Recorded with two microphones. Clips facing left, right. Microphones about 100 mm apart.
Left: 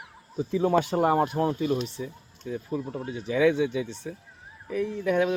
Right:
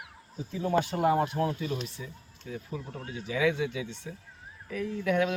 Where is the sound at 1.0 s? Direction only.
55° left (ahead or behind).